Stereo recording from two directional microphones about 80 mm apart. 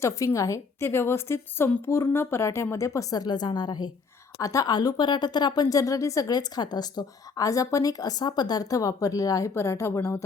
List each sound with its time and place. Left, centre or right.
0.3 s speech: left
4.4 s speech: left
9.6 s speech: left